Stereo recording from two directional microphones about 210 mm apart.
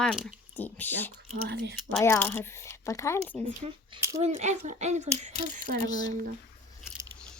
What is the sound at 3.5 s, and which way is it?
A woman's voice, 30° right (ahead or behind).